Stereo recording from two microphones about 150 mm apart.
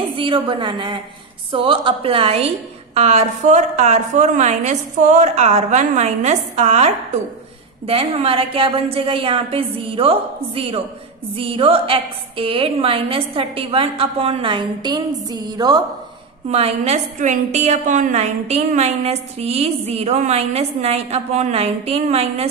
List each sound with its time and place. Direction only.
0.1 s a woman's voice: 35° right (ahead or behind)
16.4 s a woman's voice: 45° right (ahead or behind)